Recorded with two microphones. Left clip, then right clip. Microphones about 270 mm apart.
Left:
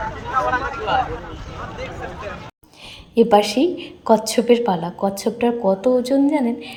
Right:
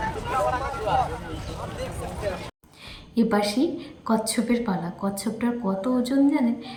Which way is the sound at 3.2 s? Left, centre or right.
Centre.